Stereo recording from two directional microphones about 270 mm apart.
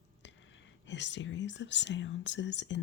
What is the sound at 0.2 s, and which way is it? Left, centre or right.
Speech, left.